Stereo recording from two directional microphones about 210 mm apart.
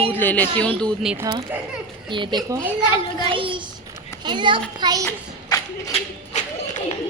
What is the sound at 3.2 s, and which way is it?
A woman's voice, 25° right (ahead or behind).